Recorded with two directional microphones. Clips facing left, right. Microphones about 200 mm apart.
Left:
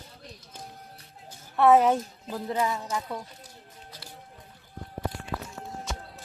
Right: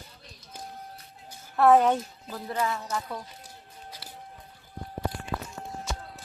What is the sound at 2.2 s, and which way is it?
Speech, 20° left (ahead or behind).